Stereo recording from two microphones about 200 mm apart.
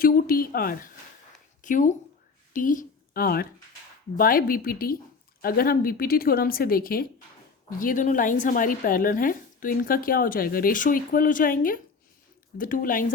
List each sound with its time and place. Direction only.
0.0 s a woman's voice: 45° left (ahead or behind)